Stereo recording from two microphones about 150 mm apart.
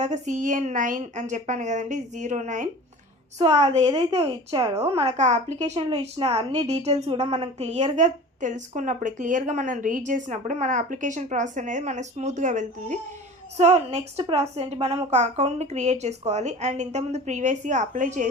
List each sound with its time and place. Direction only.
0.0 s a woman's voice: 55° right (ahead or behind)
3.4 s a woman's voice: 30° right (ahead or behind)
5.1 s a woman's voice: 50° right (ahead or behind)